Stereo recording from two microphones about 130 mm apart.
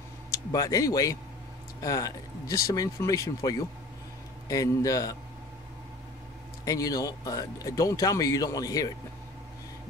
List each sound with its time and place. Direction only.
0.3 s speech: 30° left (ahead or behind)
6.6 s speech: 25° left (ahead or behind)